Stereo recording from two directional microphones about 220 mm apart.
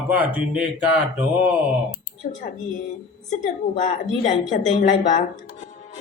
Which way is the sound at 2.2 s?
40° left (ahead or behind).